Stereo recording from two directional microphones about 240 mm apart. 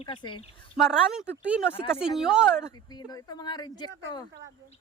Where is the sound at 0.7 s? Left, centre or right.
Centre.